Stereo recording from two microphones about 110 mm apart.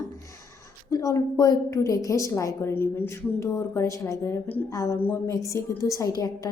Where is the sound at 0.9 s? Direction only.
35° left (ahead or behind).